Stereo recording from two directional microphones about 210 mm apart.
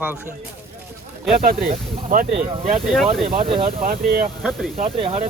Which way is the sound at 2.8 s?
Centre (ahead or behind).